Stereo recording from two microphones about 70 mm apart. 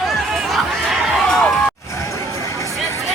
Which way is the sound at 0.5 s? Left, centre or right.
Centre.